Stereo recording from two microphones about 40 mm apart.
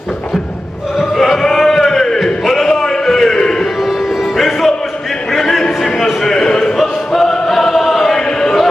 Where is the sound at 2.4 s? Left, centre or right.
Centre.